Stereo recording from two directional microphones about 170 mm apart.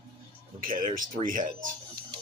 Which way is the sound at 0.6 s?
55° right (ahead or behind).